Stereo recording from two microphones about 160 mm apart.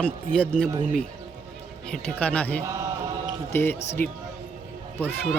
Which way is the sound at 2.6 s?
20° right (ahead or behind).